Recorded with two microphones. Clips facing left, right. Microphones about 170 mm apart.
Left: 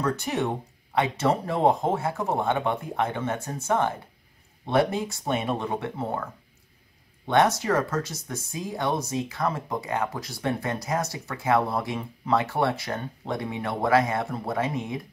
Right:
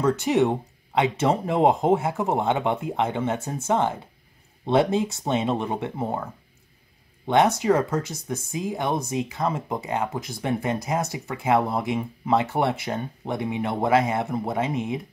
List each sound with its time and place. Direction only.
0.0 s speech: 20° right (ahead or behind)
7.2 s speech: 15° right (ahead or behind)